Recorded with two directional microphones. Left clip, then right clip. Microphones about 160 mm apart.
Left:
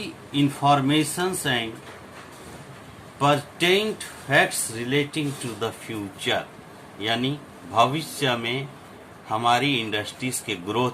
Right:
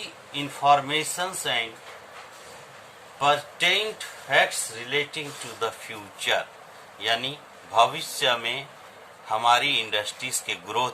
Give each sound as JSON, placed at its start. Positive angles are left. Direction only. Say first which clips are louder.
{"t": 0.0, "sound": "speech", "louder": "left 7 dB", "side_deg": 0}
{"t": 3.2, "sound": "speech", "louder": "left 1 dB", "side_deg": 0}
{"t": 5.5, "sound": "a man's voice", "louder": "right 3 dB", "side_deg": -10}